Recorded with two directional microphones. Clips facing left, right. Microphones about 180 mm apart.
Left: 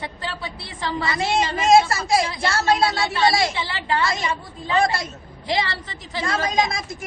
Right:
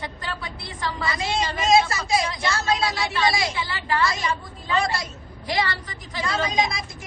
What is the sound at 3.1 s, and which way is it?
A woman's voice, 30° left (ahead or behind).